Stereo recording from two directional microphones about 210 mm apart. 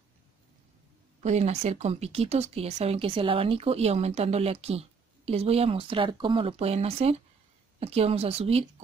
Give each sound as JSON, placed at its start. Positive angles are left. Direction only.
{"t": 1.2, "sound": "speech", "side_deg": -30}